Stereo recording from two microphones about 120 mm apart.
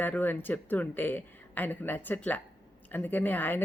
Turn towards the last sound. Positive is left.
turn(degrees=15)  # may be behind; listen again after turning